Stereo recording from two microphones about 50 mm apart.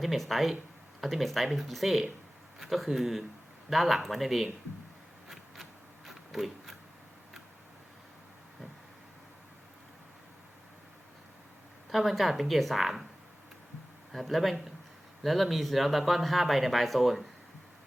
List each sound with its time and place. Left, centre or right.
0.0 s speech: centre
6.1 s a sound: centre
11.9 s speech: centre
14.1 s speech: centre